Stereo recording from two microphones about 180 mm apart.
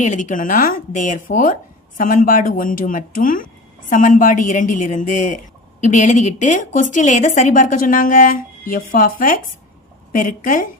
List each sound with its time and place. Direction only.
0.0 s a woman's voice: 45° left (ahead or behind)